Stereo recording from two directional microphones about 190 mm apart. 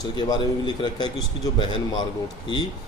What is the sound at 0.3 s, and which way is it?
Speech, 25° left (ahead or behind).